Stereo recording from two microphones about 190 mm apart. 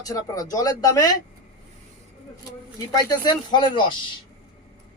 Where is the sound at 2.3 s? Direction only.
20° left (ahead or behind).